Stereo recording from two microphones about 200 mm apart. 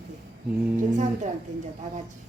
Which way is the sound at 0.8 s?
35° right (ahead or behind).